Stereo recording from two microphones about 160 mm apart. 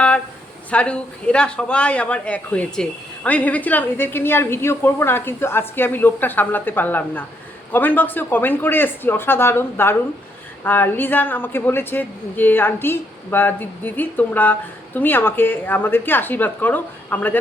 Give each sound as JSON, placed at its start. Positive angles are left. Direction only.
{"t": 0.7, "sound": "a woman's voice", "side_deg": 5}